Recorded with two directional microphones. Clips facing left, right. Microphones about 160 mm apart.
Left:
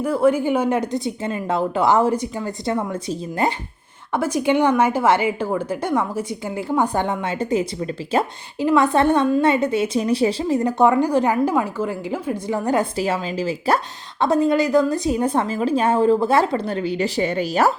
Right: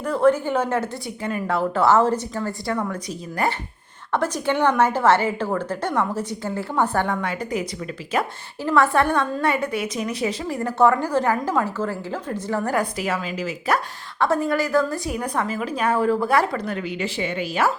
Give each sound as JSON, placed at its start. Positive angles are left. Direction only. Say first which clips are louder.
{"t": 0.0, "sound": "speech", "louder": "left 1 dB", "side_deg": 10}
{"t": 4.1, "sound": "speech", "louder": "left 3 dB", "side_deg": 10}
{"t": 8.6, "sound": "a woman's voice", "louder": "left 3 dB", "side_deg": 15}
{"t": 14.2, "sound": "a woman's voice", "louder": "left 4 dB", "side_deg": 20}